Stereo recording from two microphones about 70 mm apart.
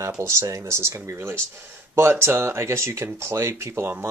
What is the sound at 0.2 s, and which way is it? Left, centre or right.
Speech, right.